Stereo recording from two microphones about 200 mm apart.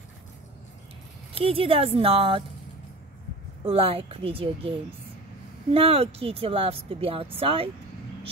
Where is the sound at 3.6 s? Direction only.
30° right (ahead or behind).